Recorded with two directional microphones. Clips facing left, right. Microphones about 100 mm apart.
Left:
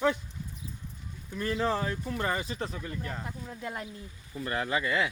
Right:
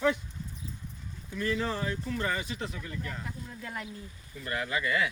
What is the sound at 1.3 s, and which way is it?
Speech, 35° left (ahead or behind).